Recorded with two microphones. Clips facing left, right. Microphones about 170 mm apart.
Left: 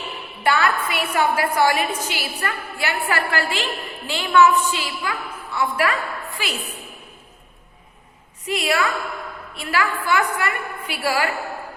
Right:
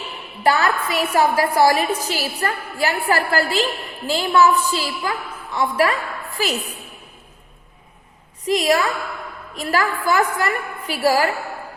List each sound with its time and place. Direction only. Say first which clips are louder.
0.4 s a woman's voice: right 2 dB; 35° right (ahead or behind)
8.4 s a woman's voice: right 4 dB; 35° right (ahead or behind)